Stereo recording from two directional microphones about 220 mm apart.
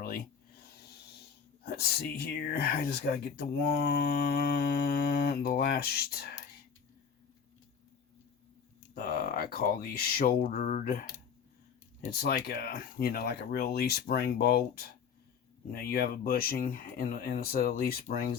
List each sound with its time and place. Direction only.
1.6 s speech: 45° left (ahead or behind)
9.0 s speech: 40° left (ahead or behind)
12.1 s speech: 45° left (ahead or behind)